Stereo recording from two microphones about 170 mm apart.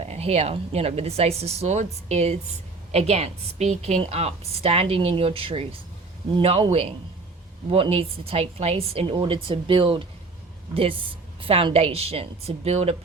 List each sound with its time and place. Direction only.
0.0 s a woman's voice: 35° right (ahead or behind)